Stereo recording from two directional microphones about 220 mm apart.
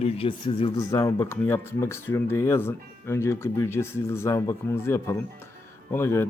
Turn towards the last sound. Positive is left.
turn(degrees=10)  # may be behind; listen again after turning